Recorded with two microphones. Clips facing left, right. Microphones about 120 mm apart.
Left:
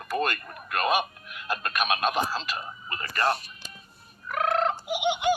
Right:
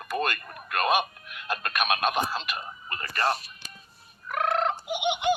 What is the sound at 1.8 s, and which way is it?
Speech, 55° right (ahead or behind).